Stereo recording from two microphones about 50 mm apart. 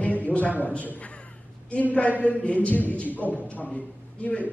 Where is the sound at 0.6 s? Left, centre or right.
Left.